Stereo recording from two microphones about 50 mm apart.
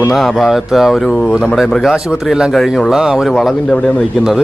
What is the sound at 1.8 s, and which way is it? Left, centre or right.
Speech, centre.